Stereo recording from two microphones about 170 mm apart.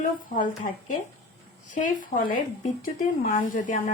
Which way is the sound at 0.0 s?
50° left (ahead or behind).